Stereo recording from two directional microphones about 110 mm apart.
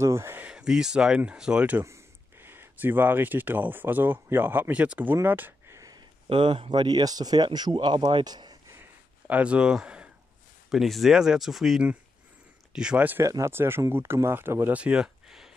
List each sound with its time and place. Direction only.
0.0 s speech: 25° right (ahead or behind)
0.5 s speech: 5° right (ahead or behind)
2.4 s speech: 20° right (ahead or behind)
5.8 s a sound: 35° right (ahead or behind)
6.2 s speech: 45° right (ahead or behind)
9.3 s speech: 10° right (ahead or behind)
13.2 s speech: 25° right (ahead or behind); by 15.5 s 5° right (ahead or behind)